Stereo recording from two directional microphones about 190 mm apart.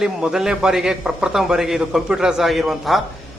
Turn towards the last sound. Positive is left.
turn(degrees=0)  # may be behind; listen again after turning